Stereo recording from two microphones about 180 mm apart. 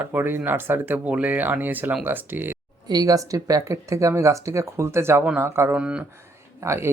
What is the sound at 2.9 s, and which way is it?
Speech, 20° right (ahead or behind).